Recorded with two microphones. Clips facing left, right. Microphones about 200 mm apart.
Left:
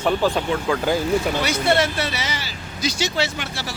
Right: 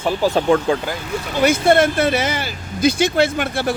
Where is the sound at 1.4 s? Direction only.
50° right (ahead or behind).